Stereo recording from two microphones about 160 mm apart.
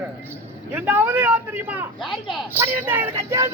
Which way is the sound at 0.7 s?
10° right (ahead or behind).